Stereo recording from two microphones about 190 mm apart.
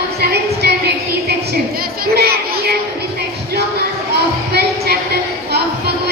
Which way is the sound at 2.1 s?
55° right (ahead or behind).